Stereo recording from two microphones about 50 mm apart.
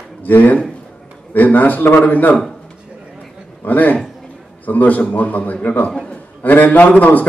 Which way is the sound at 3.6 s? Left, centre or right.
Left.